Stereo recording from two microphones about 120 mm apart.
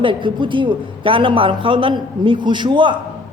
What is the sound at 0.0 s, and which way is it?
A woman's voice, 45° right (ahead or behind).